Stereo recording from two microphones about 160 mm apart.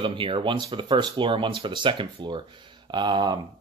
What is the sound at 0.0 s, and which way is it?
Speech, 30° right (ahead or behind).